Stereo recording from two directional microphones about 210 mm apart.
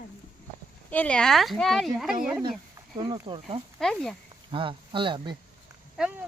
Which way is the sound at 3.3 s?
25° right (ahead or behind).